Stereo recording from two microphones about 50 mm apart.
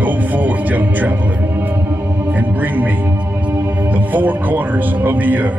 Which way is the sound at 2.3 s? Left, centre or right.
Right.